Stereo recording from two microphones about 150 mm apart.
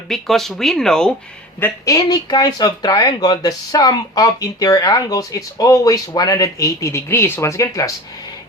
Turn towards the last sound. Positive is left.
turn(degrees=20)  # may be behind; listen again after turning